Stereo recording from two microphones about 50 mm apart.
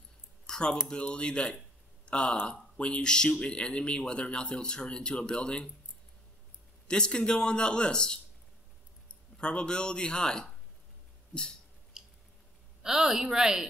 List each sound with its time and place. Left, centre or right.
0.5 s a sound: centre
0.8 s speech: centre
6.9 s speech: centre
9.4 s speech: left
11.9 s squish: centre
12.8 s speech: centre